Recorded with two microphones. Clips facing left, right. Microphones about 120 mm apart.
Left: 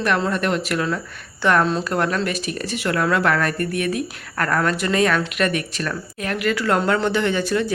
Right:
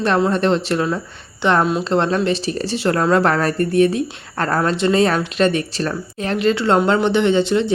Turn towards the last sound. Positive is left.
turn(degrees=-20)  # may be behind; listen again after turning